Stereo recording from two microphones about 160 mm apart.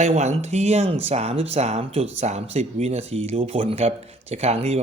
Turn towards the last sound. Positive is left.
turn(degrees=-40)  # may be behind; listen again after turning